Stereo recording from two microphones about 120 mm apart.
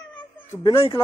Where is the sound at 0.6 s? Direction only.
45° left (ahead or behind).